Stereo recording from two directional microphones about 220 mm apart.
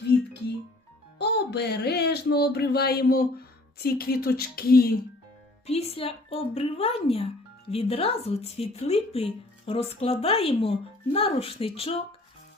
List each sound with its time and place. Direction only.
1.2 s speech: 50° left (ahead or behind)
5.6 s speech: 25° left (ahead or behind)